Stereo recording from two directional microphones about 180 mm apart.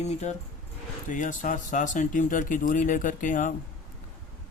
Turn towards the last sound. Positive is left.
turn(degrees=45)  # may be behind; listen again after turning